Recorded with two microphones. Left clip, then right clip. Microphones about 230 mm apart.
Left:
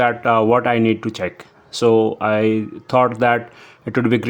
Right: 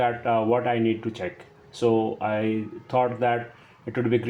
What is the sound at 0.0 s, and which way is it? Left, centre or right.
Speech, left.